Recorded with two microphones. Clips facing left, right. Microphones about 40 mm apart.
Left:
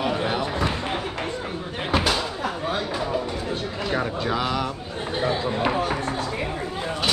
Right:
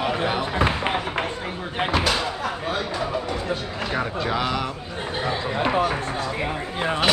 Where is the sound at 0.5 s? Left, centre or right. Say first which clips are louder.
Right 3 dB; right.